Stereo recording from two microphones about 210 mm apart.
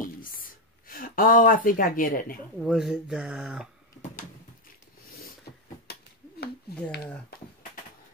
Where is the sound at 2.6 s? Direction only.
Centre (ahead or behind).